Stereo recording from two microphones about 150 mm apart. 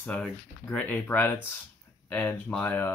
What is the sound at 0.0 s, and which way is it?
Speech, 5° left (ahead or behind).